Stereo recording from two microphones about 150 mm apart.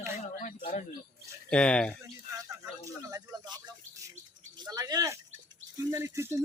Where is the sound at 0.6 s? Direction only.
40° left (ahead or behind).